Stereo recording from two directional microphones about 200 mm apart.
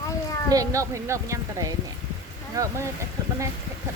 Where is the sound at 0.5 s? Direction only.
15° right (ahead or behind).